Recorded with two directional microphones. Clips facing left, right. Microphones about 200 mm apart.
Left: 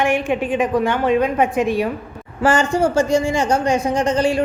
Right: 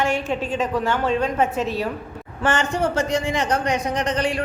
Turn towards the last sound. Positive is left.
turn(degrees=30)  # may be behind; listen again after turning